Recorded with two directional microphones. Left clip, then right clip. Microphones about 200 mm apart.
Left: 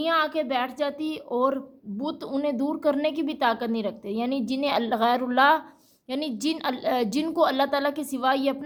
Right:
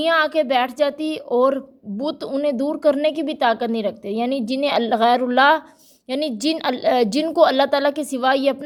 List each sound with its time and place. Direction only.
0.0 s a woman's voice: 35° right (ahead or behind)